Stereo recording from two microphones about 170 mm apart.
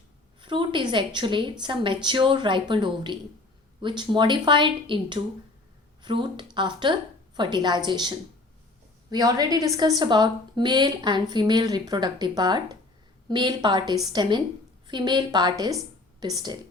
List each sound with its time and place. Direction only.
0.4 s a woman's voice: 30° right (ahead or behind)